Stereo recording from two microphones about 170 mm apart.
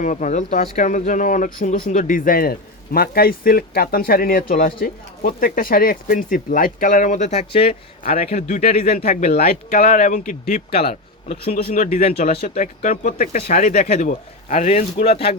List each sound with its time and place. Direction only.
0.0 s speech: 50° left (ahead or behind)
9.0 s speech: 55° left (ahead or behind)
12.0 s speech: 40° left (ahead or behind)